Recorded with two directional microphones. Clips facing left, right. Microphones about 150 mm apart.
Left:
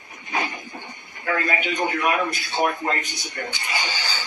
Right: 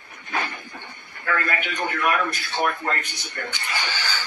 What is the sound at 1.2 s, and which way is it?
A man's voice, 20° left (ahead or behind).